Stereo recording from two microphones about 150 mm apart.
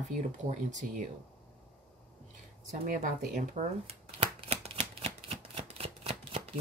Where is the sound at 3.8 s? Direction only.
40° right (ahead or behind).